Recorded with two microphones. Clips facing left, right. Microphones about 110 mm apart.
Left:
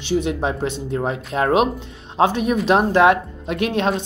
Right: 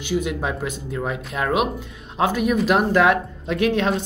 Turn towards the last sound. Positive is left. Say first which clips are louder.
# even
turn(degrees=20)  # may be behind; listen again after turning